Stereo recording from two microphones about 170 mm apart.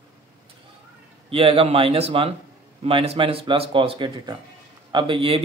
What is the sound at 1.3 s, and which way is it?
Speech, 35° right (ahead or behind).